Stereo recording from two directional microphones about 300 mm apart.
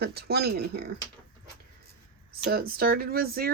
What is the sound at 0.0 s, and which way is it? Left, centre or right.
Speech, right.